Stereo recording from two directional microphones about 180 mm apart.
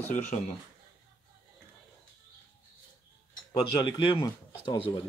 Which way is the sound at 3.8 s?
25° left (ahead or behind).